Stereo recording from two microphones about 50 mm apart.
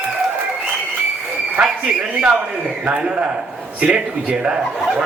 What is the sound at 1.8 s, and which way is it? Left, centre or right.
A man's voice, right.